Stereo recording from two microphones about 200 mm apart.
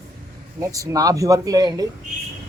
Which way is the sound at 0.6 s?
15° right (ahead or behind).